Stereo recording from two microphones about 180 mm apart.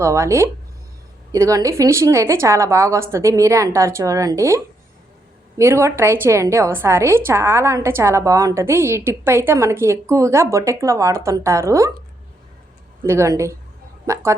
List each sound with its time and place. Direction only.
0.0 s a woman's voice: 15° right (ahead or behind)
13.0 s a woman's voice: 15° right (ahead or behind)